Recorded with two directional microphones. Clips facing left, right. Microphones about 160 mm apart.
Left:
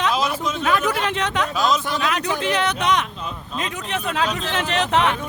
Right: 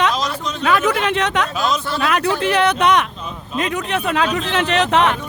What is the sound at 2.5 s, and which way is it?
Speech, 60° right (ahead or behind).